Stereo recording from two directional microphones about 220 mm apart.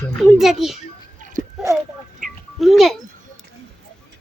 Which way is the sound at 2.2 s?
Centre (ahead or behind).